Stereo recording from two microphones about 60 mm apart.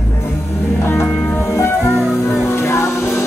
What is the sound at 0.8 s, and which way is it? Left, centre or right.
Music, left.